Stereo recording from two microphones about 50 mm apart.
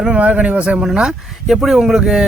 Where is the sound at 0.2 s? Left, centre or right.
Right.